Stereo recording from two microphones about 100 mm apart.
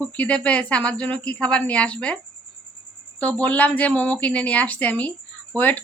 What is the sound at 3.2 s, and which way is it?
Speech, 15° left (ahead or behind).